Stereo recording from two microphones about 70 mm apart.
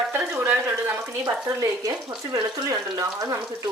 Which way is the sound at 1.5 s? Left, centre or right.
Right.